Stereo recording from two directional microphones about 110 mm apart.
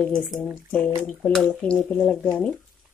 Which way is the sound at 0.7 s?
10° left (ahead or behind).